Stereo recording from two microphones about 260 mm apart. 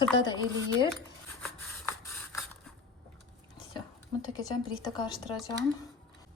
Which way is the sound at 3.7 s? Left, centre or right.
Centre.